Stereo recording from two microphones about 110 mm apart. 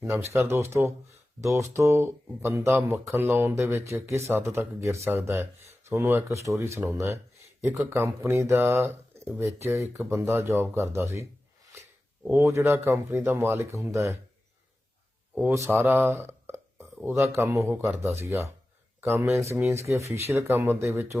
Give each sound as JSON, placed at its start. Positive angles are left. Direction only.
{"t": 0.0, "sound": "speech", "side_deg": -25}
{"t": 12.3, "sound": "speech", "side_deg": -20}
{"t": 15.5, "sound": "speech", "side_deg": -20}